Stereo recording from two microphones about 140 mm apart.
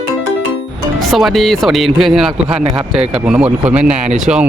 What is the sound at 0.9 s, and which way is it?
Speech, centre (ahead or behind).